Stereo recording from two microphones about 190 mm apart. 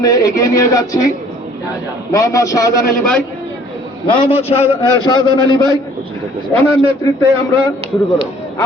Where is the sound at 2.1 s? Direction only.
15° left (ahead or behind).